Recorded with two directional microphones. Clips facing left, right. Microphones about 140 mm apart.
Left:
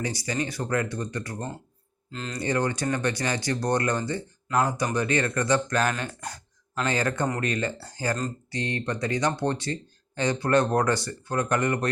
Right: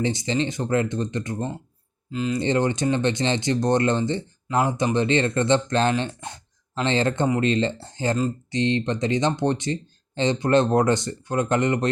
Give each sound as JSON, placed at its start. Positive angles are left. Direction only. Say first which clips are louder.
{"t": 0.0, "sound": "speech", "louder": "right 5 dB", "side_deg": -25}
{"t": 2.0, "sound": "speech", "louder": "right 10 dB", "side_deg": -5}
{"t": 2.4, "sound": "speech", "louder": "right 2 dB", "side_deg": -20}